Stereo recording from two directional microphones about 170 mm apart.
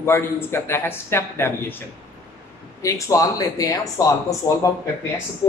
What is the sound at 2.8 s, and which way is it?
Speech, 20° left (ahead or behind).